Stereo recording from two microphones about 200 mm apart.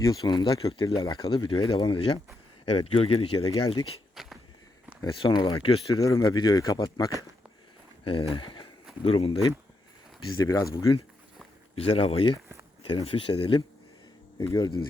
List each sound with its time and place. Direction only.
0.0 s speech: 20° left (ahead or behind)
3.4 s speech: 20° left (ahead or behind)
4.1 s a sound: centre (ahead or behind)
5.2 s speech: 20° left (ahead or behind)
10.2 s speech: 15° left (ahead or behind)
11.7 s speech: 30° left (ahead or behind)